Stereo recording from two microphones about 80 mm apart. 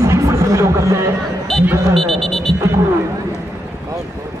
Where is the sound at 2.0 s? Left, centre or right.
Centre.